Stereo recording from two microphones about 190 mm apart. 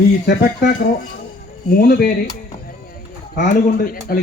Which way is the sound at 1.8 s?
60° left (ahead or behind).